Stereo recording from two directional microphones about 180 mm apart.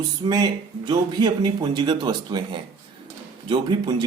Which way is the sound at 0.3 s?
25° right (ahead or behind).